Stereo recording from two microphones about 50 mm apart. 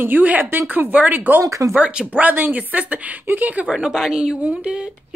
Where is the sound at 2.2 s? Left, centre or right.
Right.